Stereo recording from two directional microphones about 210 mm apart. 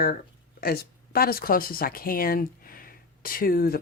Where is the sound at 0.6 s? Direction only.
45° left (ahead or behind).